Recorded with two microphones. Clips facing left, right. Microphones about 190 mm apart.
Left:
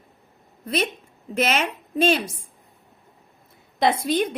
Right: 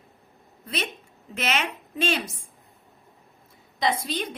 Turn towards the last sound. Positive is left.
turn(degrees=55)  # may be behind; listen again after turning